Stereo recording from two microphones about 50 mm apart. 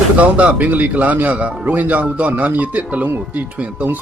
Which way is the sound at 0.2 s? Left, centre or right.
Right.